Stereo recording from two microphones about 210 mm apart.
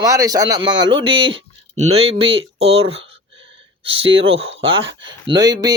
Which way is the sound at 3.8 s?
25° right (ahead or behind).